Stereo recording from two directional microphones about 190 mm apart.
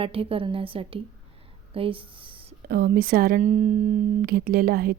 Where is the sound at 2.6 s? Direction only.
55° right (ahead or behind).